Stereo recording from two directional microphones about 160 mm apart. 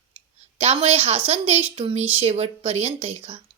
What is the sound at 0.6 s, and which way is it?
A woman's voice, 40° right (ahead or behind).